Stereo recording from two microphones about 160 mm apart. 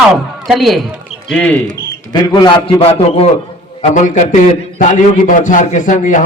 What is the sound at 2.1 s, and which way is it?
A man's voice, 30° left (ahead or behind).